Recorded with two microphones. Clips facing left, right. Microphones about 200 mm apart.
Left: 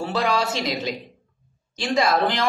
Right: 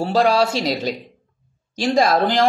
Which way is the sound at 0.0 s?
35° right (ahead or behind).